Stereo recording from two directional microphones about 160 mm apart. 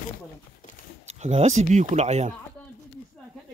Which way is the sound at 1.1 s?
45° right (ahead or behind).